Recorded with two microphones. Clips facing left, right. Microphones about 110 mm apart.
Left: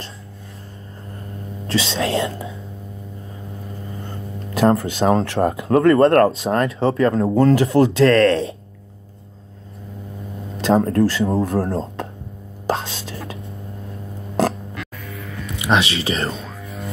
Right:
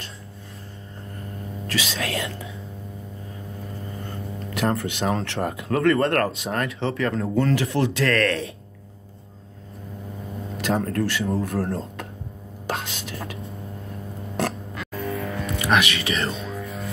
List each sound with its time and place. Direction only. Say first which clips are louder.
1.7 s speech: left 7 dB; 25° left (ahead or behind)
4.6 s speech: left 8 dB; 30° left (ahead or behind)
10.6 s speech: left 8 dB; 25° left (ahead or behind)
12.6 s whispering: left 6 dB; 30° left (ahead or behind)
15.6 s speech: left 3 dB; 25° left (ahead or behind)
16.6 s music: left 1 dB; centre (ahead or behind)